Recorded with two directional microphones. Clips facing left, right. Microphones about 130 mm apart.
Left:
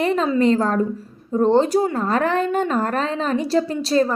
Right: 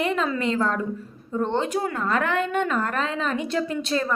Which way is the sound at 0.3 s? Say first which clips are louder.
Left 7 dB; 40° left (ahead or behind).